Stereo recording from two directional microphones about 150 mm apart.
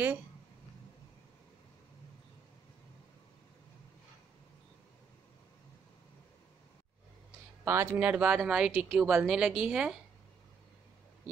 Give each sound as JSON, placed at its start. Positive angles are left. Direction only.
{"t": 7.6, "sound": "a woman's voice", "side_deg": -20}